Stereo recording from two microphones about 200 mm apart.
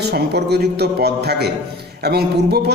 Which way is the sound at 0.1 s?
55° right (ahead or behind).